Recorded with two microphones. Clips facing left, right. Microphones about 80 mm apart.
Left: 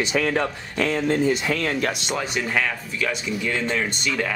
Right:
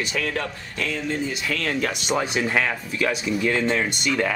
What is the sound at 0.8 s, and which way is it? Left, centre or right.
Speech, left.